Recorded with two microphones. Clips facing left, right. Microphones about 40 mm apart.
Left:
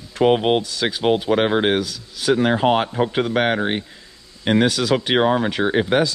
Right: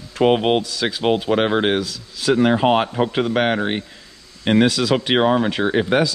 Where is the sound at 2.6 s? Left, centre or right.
Right.